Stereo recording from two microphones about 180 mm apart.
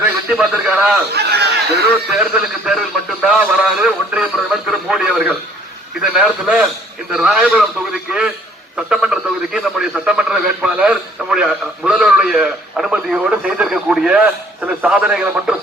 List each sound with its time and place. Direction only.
0.0 s a man's voice: 5° right (ahead or behind)
1.1 s a sound: 65° right (ahead or behind)
2.7 s speech: 5° right (ahead or behind)